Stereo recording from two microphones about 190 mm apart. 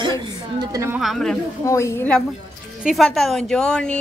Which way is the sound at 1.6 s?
15° left (ahead or behind).